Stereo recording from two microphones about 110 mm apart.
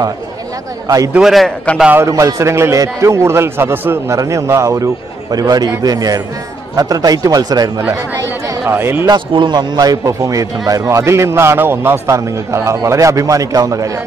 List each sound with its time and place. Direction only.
0.8 s a man's voice: 30° right (ahead or behind)
1.1 s a man's voice: centre (ahead or behind)
2.0 s a man's voice: 30° right (ahead or behind)
8.5 s a man's voice: 20° right (ahead or behind)
9.0 s a man's voice: 45° right (ahead or behind)